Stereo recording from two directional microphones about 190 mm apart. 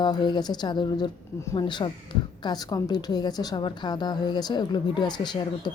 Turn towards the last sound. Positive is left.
turn(degrees=20)  # may be behind; listen again after turning